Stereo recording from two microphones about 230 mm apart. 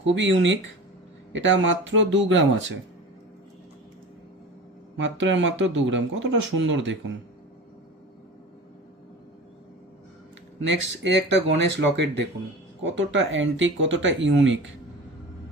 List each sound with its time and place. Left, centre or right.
0.0 s speech: right
4.9 s speech: right
10.7 s speech: right